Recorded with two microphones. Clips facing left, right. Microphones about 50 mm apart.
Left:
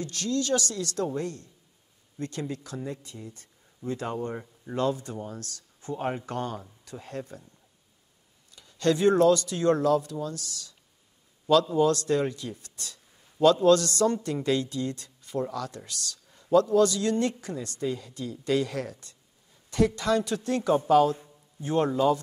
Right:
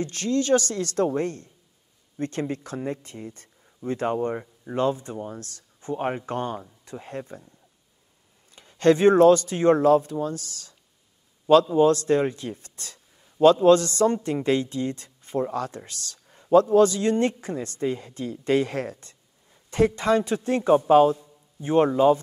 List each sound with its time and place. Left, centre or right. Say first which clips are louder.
0.0 s speech: right 4 dB; right
8.5 s speech: right 6 dB; right